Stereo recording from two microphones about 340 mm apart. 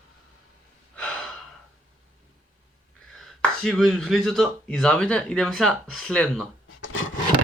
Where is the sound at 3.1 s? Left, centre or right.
Centre.